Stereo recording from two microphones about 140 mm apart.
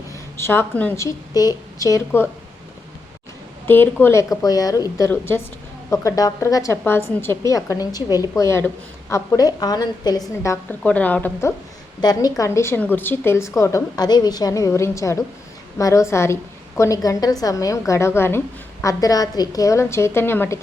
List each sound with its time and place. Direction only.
0.3 s a woman's voice: 15° left (ahead or behind)
0.9 s a woman's voice: 25° left (ahead or behind)
3.7 s a woman's voice: 15° left (ahead or behind)
10.8 s a woman's voice: 10° left (ahead or behind)
11.9 s a woman's voice: 30° left (ahead or behind)